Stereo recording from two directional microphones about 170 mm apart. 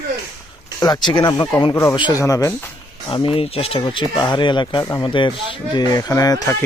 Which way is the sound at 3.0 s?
30° left (ahead or behind).